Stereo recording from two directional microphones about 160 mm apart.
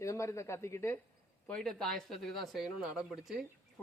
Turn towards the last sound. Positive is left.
turn(degrees=0)  # may be behind; listen again after turning